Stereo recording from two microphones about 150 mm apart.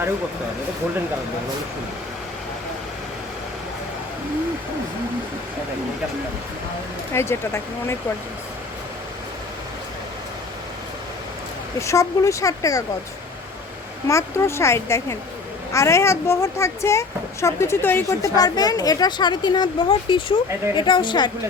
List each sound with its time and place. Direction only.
7.1 s speech: 15° left (ahead or behind)
11.8 s speech: 20° left (ahead or behind)
14.1 s speech: 20° left (ahead or behind)